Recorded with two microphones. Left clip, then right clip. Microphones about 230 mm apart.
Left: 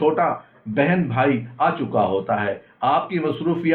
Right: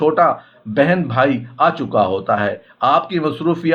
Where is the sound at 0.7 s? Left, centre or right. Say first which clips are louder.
Right 5 dB; right.